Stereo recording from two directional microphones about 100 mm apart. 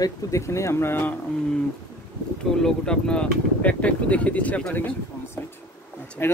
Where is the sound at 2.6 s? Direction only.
10° left (ahead or behind).